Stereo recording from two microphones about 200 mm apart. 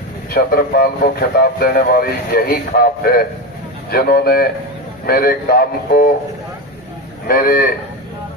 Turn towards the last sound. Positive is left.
turn(degrees=45)  # may be behind; listen again after turning